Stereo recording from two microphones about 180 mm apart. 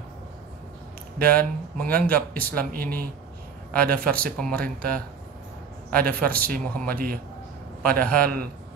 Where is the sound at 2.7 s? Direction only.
55° right (ahead or behind).